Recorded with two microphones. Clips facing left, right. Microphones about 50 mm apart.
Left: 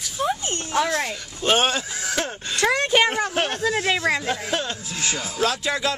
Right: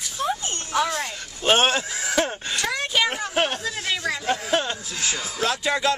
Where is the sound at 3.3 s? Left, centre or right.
Centre.